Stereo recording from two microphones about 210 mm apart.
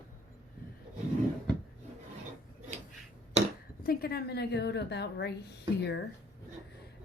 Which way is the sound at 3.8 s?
45° left (ahead or behind).